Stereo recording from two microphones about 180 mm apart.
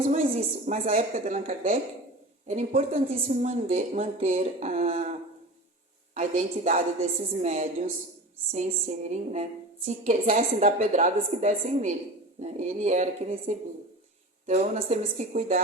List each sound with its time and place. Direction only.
0.0 s speech: 35° right (ahead or behind)
6.1 s a woman's voice: 50° right (ahead or behind)
14.4 s speech: 40° right (ahead or behind)